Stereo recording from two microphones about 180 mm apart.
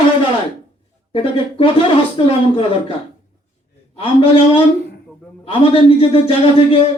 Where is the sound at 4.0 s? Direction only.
30° left (ahead or behind).